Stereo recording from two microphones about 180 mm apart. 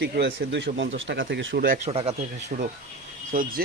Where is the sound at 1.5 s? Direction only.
50° right (ahead or behind).